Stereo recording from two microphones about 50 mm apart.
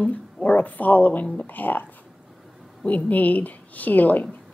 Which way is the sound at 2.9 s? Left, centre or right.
Left.